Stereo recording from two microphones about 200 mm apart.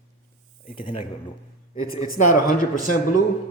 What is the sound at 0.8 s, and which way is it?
Speech, 25° left (ahead or behind).